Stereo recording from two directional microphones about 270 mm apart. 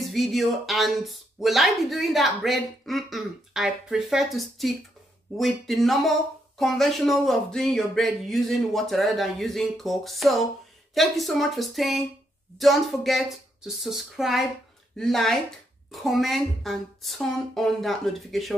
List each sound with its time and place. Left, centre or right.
0.1 s speech: centre